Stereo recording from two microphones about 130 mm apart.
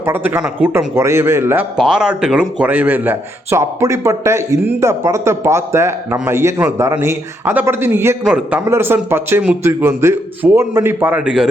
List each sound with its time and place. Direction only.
0.0 s a man's voice: 15° right (ahead or behind)
1.7 s a man's voice: 5° right (ahead or behind)
11.2 s speech: 5° right (ahead or behind)